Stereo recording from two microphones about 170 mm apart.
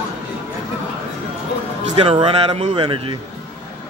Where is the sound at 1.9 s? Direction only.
35° right (ahead or behind).